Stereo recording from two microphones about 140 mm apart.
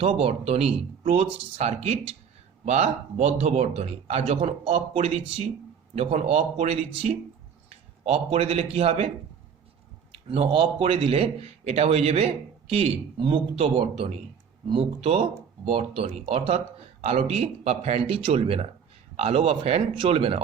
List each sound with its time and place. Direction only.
0.0 s a man's voice: 40° right (ahead or behind)
10.1 s a man's voice: 45° right (ahead or behind)